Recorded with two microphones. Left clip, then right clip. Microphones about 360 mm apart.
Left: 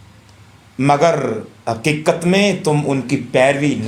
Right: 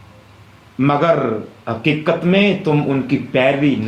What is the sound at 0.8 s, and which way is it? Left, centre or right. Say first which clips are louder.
A man's voice: left 1 dB; centre.